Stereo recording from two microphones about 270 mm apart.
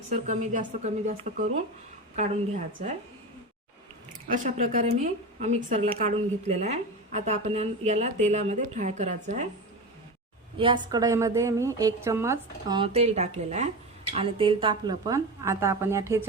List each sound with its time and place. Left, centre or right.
0.1 s a woman's voice: right
4.3 s a woman's voice: right
10.6 s a woman's voice: centre